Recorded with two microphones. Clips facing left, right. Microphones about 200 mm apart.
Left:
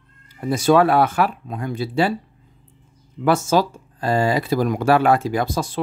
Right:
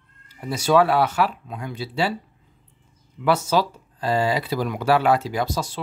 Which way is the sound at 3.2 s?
45° left (ahead or behind).